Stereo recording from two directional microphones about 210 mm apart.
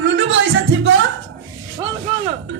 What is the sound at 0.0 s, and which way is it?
Music, 65° right (ahead or behind).